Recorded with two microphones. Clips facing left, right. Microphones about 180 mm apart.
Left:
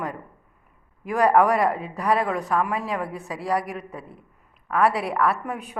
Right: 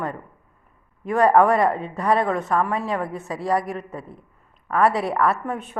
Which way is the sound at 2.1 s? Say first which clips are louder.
Right 2 dB; 5° left (ahead or behind).